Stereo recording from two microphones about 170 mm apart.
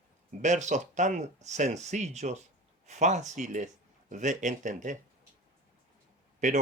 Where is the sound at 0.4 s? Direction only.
45° right (ahead or behind).